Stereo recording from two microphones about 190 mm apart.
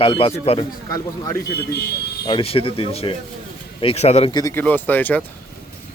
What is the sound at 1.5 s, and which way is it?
Speech, 60° left (ahead or behind).